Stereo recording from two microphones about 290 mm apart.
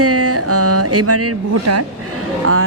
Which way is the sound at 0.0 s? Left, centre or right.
Right.